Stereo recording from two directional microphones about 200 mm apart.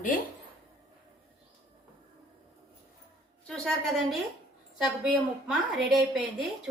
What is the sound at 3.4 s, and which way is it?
Speech, centre (ahead or behind).